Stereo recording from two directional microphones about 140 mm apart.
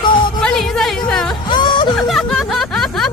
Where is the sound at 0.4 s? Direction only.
5° left (ahead or behind).